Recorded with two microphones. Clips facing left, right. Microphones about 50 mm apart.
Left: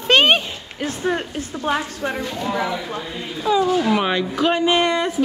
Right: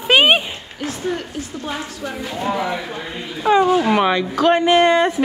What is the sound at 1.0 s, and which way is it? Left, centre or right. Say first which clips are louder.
A woman's voice: left 2 dB; left.